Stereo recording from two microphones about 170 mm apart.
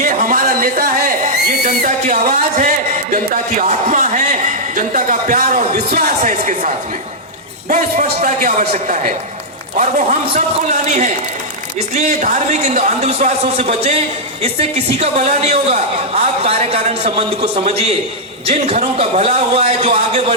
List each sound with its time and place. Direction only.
0.0 s a sound: 50° right (ahead or behind)
1.8 s music: 45° right (ahead or behind)
3.6 s a man's voice: 45° right (ahead or behind)
5.9 s speech: 60° right (ahead or behind)
6.4 s a man's voice: 45° right (ahead or behind)